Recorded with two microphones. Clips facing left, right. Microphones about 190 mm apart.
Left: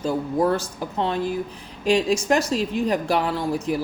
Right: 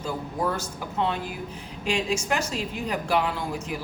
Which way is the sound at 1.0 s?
35° left (ahead or behind).